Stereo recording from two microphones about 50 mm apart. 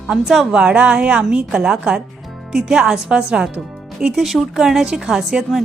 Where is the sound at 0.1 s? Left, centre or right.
Centre.